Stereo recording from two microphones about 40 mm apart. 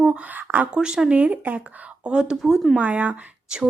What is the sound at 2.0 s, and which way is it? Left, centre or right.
Speech, right.